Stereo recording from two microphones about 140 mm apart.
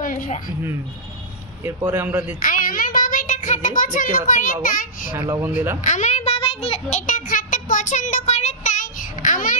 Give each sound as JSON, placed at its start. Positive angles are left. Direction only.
{"t": 0.0, "sound": "a sound", "side_deg": 75}
{"t": 1.9, "sound": "a man's voice", "side_deg": -15}
{"t": 2.4, "sound": "a child's voice", "side_deg": 80}
{"t": 5.4, "sound": "a man's voice", "side_deg": -15}
{"t": 5.9, "sound": "a child's voice", "side_deg": 55}